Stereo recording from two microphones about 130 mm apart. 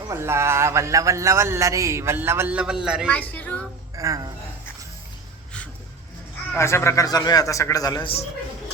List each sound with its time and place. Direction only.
0.1 s a man's voice: 20° right (ahead or behind)
3.1 s speech: 15° left (ahead or behind)
3.9 s speech: 25° right (ahead or behind)
6.6 s a man's voice: 20° left (ahead or behind)